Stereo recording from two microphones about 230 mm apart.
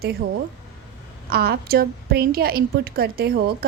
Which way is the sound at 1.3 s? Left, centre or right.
Right.